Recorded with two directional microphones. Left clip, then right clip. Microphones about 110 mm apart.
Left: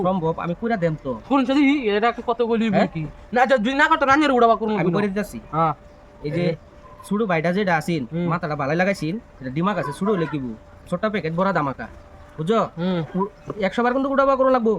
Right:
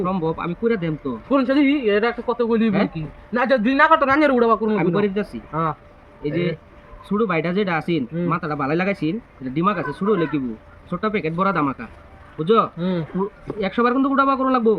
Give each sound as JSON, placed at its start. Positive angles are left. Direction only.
{"t": 0.0, "sound": "speech", "side_deg": 30}
{"t": 1.3, "sound": "a man's voice", "side_deg": 60}
{"t": 3.3, "sound": "a man's voice", "side_deg": 55}
{"t": 4.8, "sound": "speech", "side_deg": 35}
{"t": 12.8, "sound": "a man's voice", "side_deg": 60}
{"t": 13.6, "sound": "speech", "side_deg": 45}